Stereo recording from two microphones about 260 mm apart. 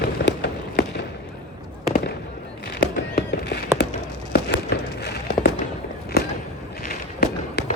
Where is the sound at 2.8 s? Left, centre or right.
Left.